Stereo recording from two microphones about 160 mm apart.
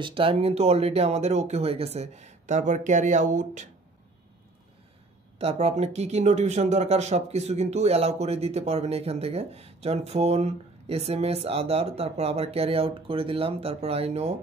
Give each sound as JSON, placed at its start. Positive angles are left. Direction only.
{"t": 0.0, "sound": "speech", "side_deg": -35}
{"t": 5.4, "sound": "speech", "side_deg": -40}